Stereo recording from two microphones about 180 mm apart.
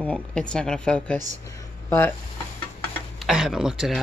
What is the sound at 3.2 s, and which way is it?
Speech, 5° right (ahead or behind).